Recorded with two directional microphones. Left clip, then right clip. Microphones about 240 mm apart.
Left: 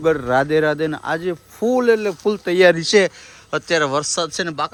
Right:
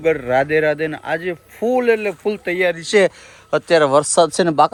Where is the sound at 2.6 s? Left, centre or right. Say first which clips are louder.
Left 7 dB; left.